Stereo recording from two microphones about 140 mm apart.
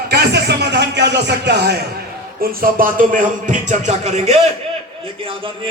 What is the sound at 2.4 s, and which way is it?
Speech, 90° right.